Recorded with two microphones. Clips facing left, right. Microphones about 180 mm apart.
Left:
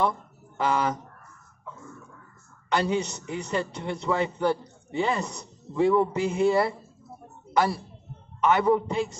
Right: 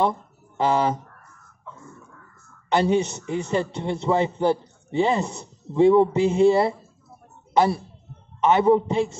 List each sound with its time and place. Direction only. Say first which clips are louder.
0.6 s a man's voice: right 4 dB; 25° right (ahead or behind)
2.7 s a man's voice: right 5 dB; 25° right (ahead or behind)